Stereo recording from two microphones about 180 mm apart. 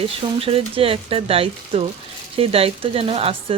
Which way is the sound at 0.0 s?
30° right (ahead or behind).